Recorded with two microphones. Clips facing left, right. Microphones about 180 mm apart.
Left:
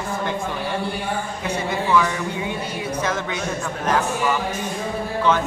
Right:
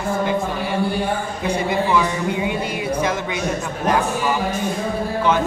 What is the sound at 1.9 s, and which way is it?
Speech, 15° right (ahead or behind).